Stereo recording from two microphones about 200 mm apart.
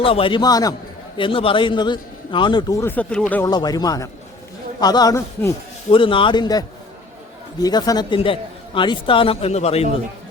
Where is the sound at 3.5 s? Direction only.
20° left (ahead or behind).